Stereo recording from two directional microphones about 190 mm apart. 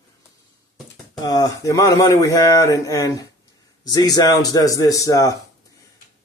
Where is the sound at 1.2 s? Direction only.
20° left (ahead or behind).